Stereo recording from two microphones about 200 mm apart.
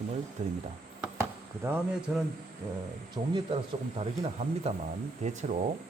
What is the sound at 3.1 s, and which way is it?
Speech, 20° right (ahead or behind).